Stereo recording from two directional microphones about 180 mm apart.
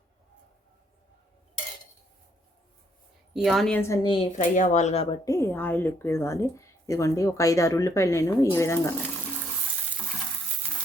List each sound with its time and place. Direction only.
3.3 s a woman's voice: centre (ahead or behind)
3.8 s a woman's voice: 15° left (ahead or behind)
4.3 s speech: 45° left (ahead or behind); by 9.0 s 15° left (ahead or behind)